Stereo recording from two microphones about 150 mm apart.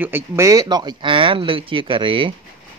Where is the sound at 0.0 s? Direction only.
15° right (ahead or behind); by 2.3 s 35° right (ahead or behind).